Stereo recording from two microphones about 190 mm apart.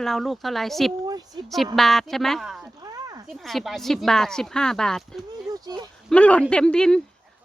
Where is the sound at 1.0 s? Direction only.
20° right (ahead or behind).